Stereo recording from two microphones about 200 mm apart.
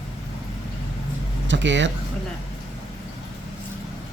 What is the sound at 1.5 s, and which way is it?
Speech, 65° right (ahead or behind).